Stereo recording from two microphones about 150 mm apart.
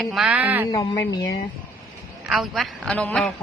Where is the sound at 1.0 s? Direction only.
25° left (ahead or behind).